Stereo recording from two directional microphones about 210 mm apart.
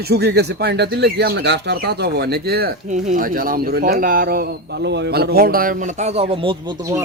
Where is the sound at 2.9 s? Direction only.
35° right (ahead or behind); by 7.0 s 20° right (ahead or behind).